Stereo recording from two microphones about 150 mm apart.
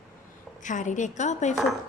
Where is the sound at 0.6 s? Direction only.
55° left (ahead or behind).